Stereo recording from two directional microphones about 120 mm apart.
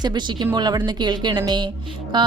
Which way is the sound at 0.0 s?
40° right (ahead or behind).